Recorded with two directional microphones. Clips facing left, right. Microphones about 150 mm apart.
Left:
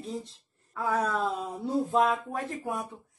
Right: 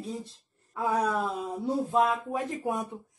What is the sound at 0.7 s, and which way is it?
A woman's voice, 15° right (ahead or behind).